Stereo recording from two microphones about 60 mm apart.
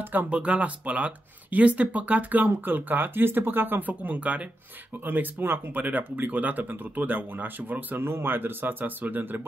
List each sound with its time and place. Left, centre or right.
0.0 s speech: right
0.3 s speech: centre